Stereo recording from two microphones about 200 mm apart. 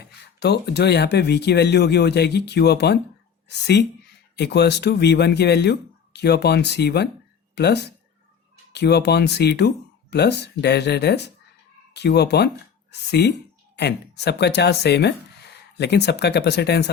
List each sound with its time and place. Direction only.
0.3 s speech: 55° left (ahead or behind)
4.4 s speech: 55° left (ahead or behind)